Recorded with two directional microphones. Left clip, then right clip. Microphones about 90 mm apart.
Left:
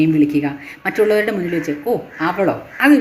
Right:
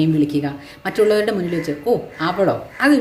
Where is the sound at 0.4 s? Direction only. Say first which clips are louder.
Left 3 dB; 20° right (ahead or behind).